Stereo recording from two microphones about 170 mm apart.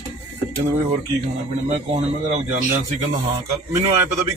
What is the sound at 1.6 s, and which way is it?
A man's voice, 45° right (ahead or behind).